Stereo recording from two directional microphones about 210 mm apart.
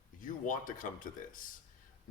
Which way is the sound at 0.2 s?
40° left (ahead or behind).